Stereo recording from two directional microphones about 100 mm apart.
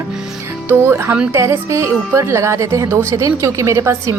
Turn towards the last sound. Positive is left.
turn(degrees=-30)  # may be behind; listen again after turning